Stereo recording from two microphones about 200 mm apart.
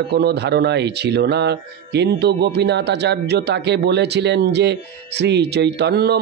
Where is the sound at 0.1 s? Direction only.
55° right (ahead or behind).